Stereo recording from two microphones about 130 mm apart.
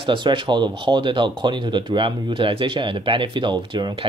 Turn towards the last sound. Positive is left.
turn(degrees=-35)  # may be behind; listen again after turning